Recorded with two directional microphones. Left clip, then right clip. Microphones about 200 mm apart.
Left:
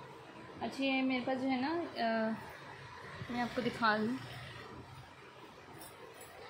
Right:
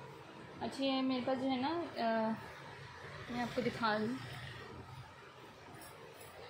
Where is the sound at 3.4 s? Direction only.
20° left (ahead or behind).